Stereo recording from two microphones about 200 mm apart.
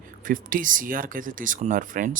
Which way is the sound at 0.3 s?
40° right (ahead or behind).